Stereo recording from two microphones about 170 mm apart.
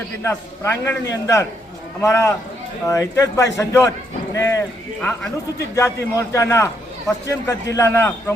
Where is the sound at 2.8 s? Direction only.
20° left (ahead or behind).